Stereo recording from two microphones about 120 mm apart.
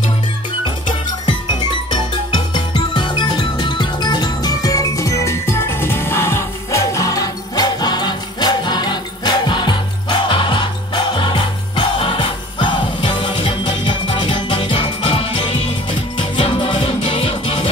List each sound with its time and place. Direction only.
1.2 s music: 40° left (ahead or behind)